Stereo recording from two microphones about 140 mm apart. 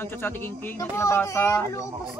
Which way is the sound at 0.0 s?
15° left (ahead or behind).